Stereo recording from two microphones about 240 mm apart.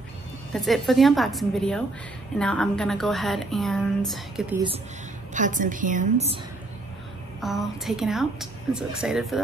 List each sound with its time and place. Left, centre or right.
0.5 s a woman's voice: centre
5.3 s a woman's voice: right
7.3 s a woman's voice: centre